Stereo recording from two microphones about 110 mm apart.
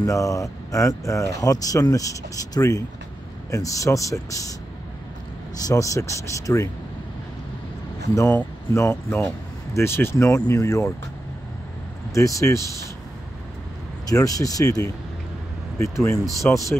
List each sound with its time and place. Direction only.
0.0 s speech: 30° left (ahead or behind)
5.6 s speech: 30° left (ahead or behind)
8.3 s speech: 20° left (ahead or behind)
12.1 s speech: 30° left (ahead or behind)
14.0 s speech: 30° left (ahead or behind)
16.5 s speech: 15° left (ahead or behind)